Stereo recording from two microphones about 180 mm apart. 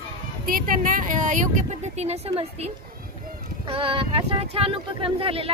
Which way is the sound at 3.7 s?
30° right (ahead or behind).